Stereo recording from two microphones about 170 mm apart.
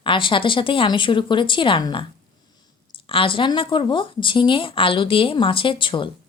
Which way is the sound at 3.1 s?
30° left (ahead or behind).